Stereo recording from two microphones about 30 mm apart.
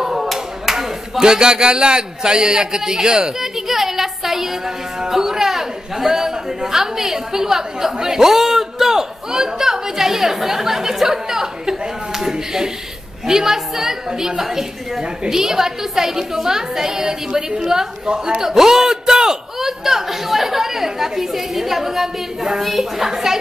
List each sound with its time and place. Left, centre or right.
0.0 s speech: centre
18.4 s speech: centre